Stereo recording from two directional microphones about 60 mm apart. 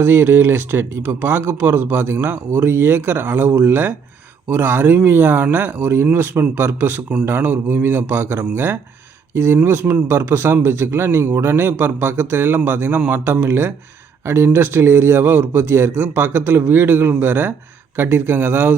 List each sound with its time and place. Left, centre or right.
0.0 s speech: right